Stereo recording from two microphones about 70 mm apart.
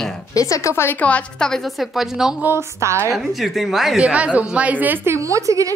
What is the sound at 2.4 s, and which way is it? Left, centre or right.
Speech, right.